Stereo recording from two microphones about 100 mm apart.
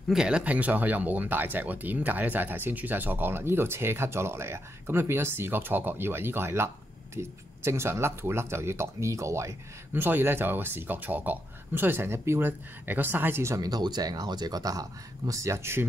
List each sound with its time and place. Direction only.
0.1 s speech: 10° right (ahead or behind); by 13.7 s 30° right (ahead or behind)
13.7 s speech: 45° right (ahead or behind); by 15.8 s 25° right (ahead or behind)